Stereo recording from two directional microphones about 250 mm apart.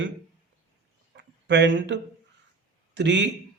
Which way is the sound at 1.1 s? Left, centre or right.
Right.